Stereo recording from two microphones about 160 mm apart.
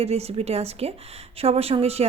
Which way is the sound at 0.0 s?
40° right (ahead or behind).